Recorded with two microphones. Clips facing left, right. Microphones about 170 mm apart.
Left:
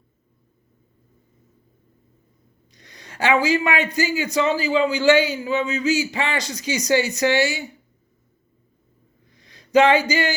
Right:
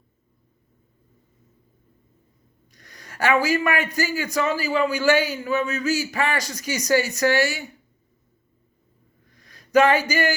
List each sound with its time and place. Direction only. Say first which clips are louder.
2.7 s a man's voice: left 1 dB; 20° left (ahead or behind)
9.4 s speech: left 1 dB; 20° left (ahead or behind)